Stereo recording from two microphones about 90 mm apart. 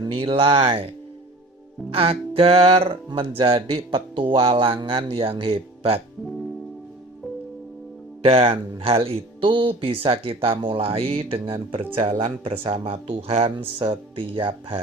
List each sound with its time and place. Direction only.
0.0 s speech: 80° right
2.0 s speech: 90° right
8.2 s speech: 90° right
10.6 s speech: 75° right (ahead or behind)